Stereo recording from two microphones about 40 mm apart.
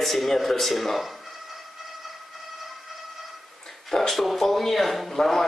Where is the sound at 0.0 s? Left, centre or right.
Centre.